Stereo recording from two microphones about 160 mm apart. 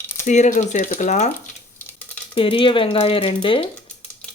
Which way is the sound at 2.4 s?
35° left (ahead or behind).